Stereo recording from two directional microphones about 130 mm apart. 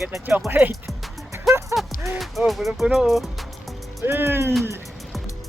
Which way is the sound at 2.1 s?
Centre (ahead or behind).